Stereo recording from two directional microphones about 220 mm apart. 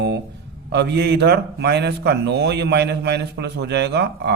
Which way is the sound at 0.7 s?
50° right (ahead or behind).